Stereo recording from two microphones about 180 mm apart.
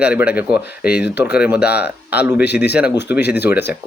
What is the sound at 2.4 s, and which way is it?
A man's voice, 65° left (ahead or behind).